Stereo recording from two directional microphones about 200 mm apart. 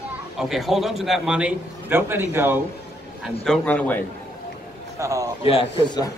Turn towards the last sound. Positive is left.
turn(degrees=25)  # may be behind; listen again after turning